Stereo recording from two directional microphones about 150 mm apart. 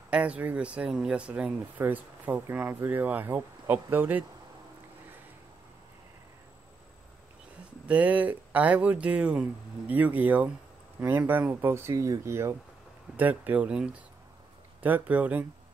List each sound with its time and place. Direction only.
0.1 s speech: 10° right (ahead or behind)
7.9 s speech: 10° right (ahead or behind)